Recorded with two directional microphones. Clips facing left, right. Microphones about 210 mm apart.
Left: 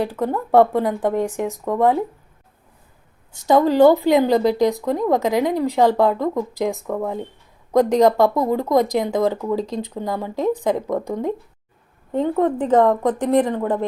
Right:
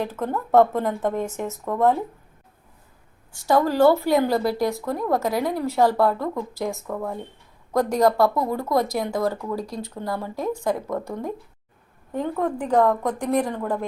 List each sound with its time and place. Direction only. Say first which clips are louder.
0.0 s speech: left 4 dB; 15° left (ahead or behind)
3.3 s speech: left 5 dB; 20° left (ahead or behind)